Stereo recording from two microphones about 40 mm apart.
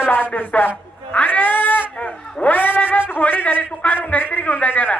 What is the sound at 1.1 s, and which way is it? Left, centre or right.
Cat, left.